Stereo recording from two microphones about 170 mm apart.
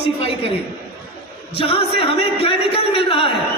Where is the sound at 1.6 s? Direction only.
35° left (ahead or behind).